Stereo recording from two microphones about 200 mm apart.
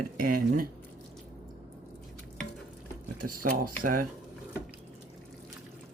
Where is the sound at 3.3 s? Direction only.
45° right (ahead or behind).